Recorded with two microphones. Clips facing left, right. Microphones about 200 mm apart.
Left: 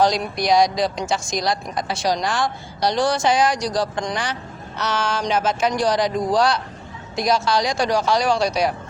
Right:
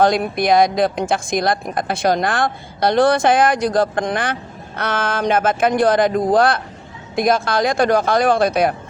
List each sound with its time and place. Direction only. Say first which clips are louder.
0.0 s speech: right 4 dB; 55° right (ahead or behind)